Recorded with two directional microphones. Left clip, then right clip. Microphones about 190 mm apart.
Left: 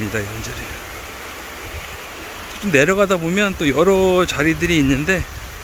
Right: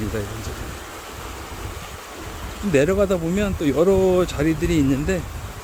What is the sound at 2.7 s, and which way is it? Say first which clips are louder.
Speech: left 4 dB; centre (ahead or behind).